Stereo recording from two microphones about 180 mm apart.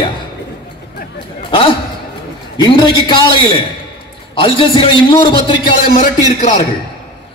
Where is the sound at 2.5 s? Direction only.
25° left (ahead or behind).